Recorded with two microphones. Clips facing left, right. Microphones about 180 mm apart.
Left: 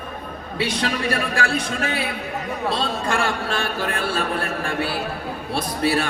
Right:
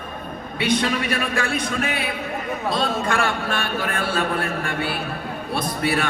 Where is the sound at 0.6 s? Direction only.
30° left (ahead or behind).